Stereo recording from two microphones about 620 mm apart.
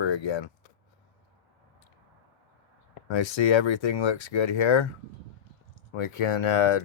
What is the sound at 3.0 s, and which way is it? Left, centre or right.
Speech, left.